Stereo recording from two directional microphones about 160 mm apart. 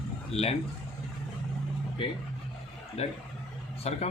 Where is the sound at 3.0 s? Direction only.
40° left (ahead or behind).